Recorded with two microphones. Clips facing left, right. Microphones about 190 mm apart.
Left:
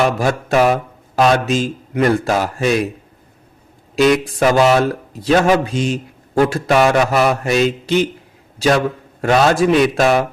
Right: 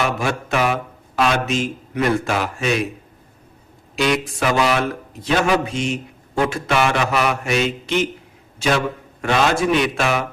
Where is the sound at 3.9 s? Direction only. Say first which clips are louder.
Left 7 dB; 40° left (ahead or behind).